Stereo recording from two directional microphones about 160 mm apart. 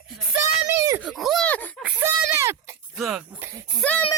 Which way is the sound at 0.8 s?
20° right (ahead or behind).